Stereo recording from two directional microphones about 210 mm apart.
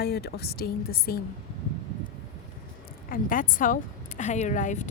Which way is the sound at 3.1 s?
40° left (ahead or behind).